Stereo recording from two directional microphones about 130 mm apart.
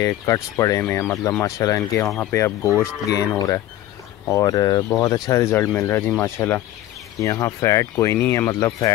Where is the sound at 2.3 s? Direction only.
20° left (ahead or behind).